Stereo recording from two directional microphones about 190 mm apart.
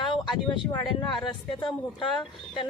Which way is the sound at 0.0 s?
25° left (ahead or behind).